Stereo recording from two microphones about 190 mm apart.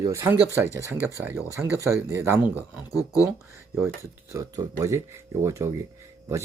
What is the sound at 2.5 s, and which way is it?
Speech, 15° left (ahead or behind).